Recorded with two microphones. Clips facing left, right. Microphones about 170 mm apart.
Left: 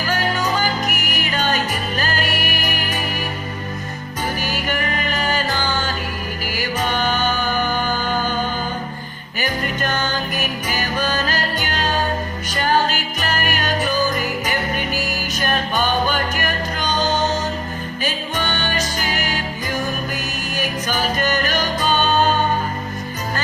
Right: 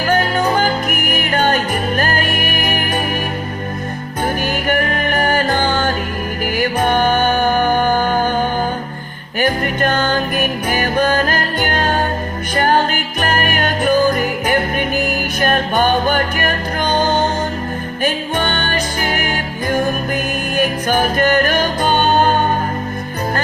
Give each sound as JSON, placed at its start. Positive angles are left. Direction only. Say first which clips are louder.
{"t": 0.1, "sound": "music", "louder": "right 6 dB", "side_deg": -55}
{"t": 4.4, "sound": "music", "louder": "right 6 dB", "side_deg": -55}